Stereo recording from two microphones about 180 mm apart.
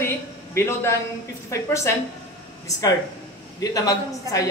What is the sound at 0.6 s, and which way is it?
A man's voice, 15° left (ahead or behind).